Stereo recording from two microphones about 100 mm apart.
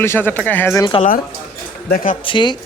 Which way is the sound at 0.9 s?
65° left (ahead or behind).